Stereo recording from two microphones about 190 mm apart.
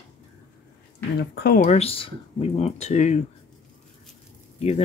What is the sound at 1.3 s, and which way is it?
Speech, 55° left (ahead or behind).